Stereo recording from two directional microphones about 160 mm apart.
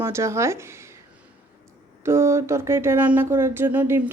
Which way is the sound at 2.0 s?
15° right (ahead or behind).